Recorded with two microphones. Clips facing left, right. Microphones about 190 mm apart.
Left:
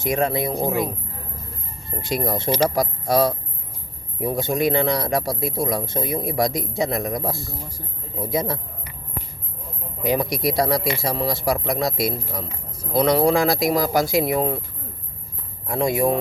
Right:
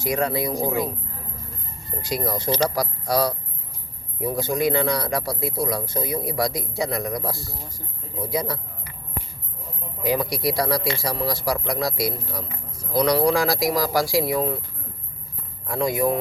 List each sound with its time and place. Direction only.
0.0 s a man's voice: 20° left (ahead or behind)
2.0 s a man's voice: 25° left (ahead or behind)
10.0 s a man's voice: 20° left (ahead or behind)
15.6 s a man's voice: 25° left (ahead or behind)